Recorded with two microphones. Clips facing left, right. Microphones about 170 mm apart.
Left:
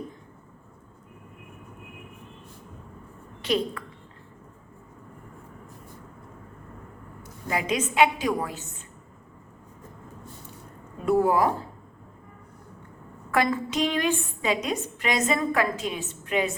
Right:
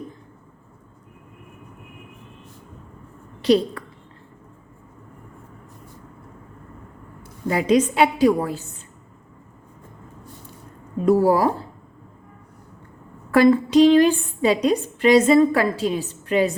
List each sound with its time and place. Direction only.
3.4 s a woman's voice: 35° right (ahead or behind)
7.4 s a woman's voice: 35° right (ahead or behind)
11.0 s a woman's voice: 35° right (ahead or behind)
13.3 s a woman's voice: 35° right (ahead or behind)